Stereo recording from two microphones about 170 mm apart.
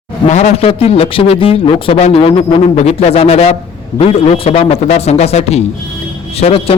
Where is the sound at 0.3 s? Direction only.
40° left (ahead or behind).